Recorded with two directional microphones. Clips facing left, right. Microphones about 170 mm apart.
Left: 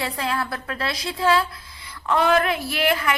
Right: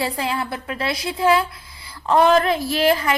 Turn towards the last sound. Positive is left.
turn(degrees=-35)  # may be behind; listen again after turning